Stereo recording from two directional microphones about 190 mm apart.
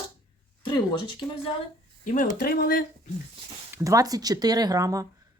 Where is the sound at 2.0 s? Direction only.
45° left (ahead or behind).